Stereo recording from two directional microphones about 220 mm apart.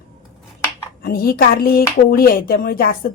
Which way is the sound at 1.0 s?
45° left (ahead or behind).